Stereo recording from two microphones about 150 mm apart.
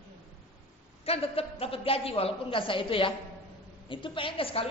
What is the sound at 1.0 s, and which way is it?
A woman's voice, 40° left (ahead or behind).